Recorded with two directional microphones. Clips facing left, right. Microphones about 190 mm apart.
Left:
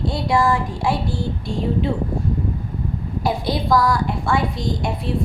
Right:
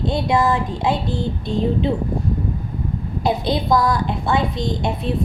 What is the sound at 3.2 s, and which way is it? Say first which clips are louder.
A woman's voice: right 2 dB; 20° right (ahead or behind).